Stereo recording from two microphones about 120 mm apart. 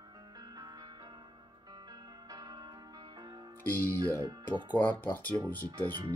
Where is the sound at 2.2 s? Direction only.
35° right (ahead or behind).